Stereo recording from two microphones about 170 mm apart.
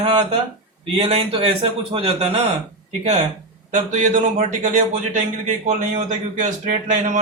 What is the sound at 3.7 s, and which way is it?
A man's voice, 45° right (ahead or behind).